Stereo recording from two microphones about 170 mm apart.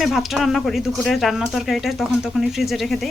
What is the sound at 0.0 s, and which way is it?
Speech, centre (ahead or behind).